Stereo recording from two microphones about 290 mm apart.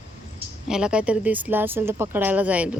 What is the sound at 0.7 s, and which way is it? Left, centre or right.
Speech, centre.